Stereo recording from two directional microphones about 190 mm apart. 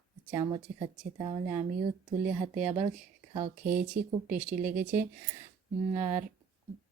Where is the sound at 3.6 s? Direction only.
10° right (ahead or behind).